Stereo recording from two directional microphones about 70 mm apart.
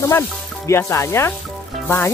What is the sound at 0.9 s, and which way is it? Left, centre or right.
Speech, left.